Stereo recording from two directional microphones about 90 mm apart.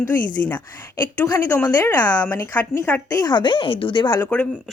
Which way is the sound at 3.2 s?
55° left (ahead or behind).